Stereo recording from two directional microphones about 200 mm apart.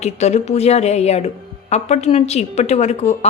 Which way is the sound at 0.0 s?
35° left (ahead or behind).